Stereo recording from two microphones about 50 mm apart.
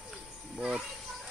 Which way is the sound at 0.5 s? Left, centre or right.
Centre.